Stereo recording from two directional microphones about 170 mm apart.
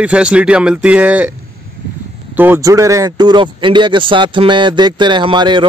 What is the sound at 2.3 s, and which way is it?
Speech, 10° right (ahead or behind).